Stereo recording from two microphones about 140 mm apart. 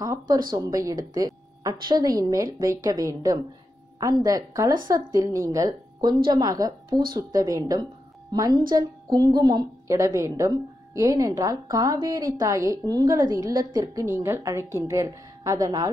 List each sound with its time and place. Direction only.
0.0 s a woman's voice: 25° right (ahead or behind)